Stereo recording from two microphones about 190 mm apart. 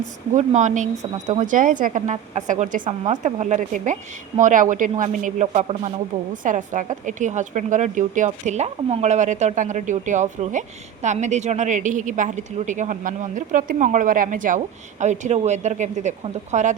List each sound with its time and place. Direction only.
0.3 s a woman's voice: 40° right (ahead or behind)